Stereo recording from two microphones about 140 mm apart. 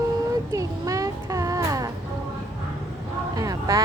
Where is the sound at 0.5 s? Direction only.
25° right (ahead or behind).